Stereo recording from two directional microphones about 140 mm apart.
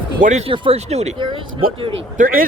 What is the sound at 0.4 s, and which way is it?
Speech, 40° right (ahead or behind).